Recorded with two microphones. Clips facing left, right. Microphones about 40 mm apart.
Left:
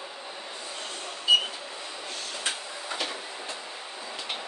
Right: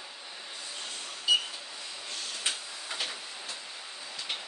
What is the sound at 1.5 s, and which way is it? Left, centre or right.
Printer, left.